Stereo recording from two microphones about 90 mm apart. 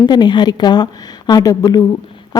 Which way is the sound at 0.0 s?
50° left (ahead or behind).